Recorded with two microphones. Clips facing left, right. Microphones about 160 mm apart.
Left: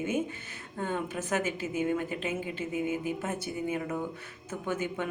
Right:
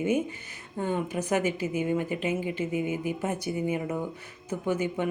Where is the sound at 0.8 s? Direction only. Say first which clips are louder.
Right 4 dB; 15° right (ahead or behind).